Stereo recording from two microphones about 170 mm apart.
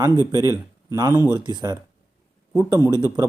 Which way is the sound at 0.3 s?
20° right (ahead or behind).